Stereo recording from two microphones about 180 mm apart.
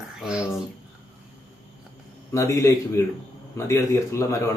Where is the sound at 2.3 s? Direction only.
15° left (ahead or behind).